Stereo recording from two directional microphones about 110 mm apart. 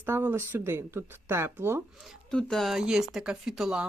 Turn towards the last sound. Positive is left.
turn(degrees=-5)  # may be behind; listen again after turning